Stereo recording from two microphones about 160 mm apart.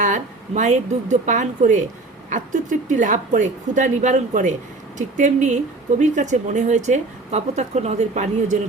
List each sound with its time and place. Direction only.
0.0 s a woman's voice: 50° right (ahead or behind)